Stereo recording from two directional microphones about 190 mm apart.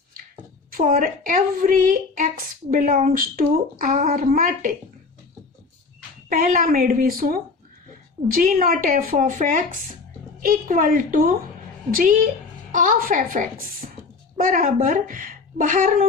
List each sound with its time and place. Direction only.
0.7 s a woman's voice: 45° right (ahead or behind)
6.2 s a woman's voice: 45° right (ahead or behind)